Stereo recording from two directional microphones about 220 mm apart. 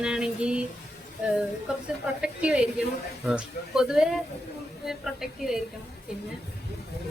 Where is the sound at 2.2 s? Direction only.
5° right (ahead or behind).